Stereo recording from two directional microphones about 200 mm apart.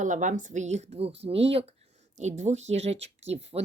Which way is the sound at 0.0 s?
40° right (ahead or behind).